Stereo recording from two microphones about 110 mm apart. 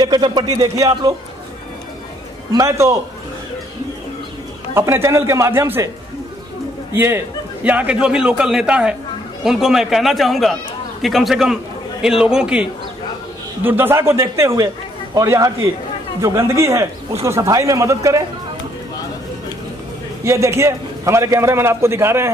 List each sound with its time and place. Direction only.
0.0 s speech: 40° right (ahead or behind)
2.5 s a man's voice: 30° right (ahead or behind)
4.7 s a man's voice: 20° right (ahead or behind)
6.9 s a man's voice: 20° right (ahead or behind)
13.6 s a man's voice: 20° right (ahead or behind)
20.2 s a man's voice: 25° right (ahead or behind)